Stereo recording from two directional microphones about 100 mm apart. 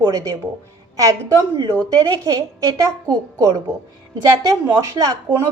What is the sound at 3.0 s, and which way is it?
Speech, 30° right (ahead or behind).